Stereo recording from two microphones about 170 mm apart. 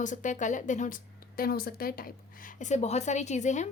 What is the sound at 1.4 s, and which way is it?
A woman's voice, 65° left (ahead or behind).